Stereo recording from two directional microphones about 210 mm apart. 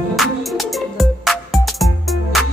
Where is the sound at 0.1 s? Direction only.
Centre (ahead or behind).